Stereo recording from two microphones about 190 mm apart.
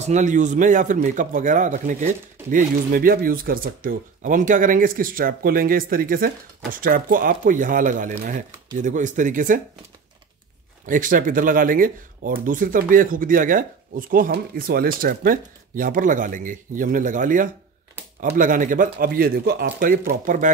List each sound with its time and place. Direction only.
0.0 s speech: 40° right (ahead or behind)
10.9 s speech: 45° right (ahead or behind)